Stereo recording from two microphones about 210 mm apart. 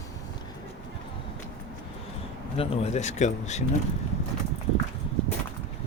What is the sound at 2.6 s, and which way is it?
Speech, 30° left (ahead or behind).